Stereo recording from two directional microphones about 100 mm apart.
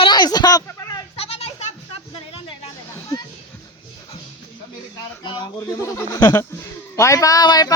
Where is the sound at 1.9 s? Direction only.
75° left (ahead or behind).